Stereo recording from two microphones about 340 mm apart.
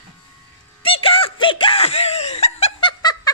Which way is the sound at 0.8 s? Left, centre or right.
Centre.